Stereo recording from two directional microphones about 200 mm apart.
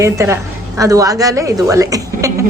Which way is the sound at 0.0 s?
15° right (ahead or behind).